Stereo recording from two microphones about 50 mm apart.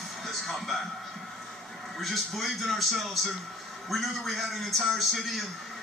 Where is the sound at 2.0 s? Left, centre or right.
Centre.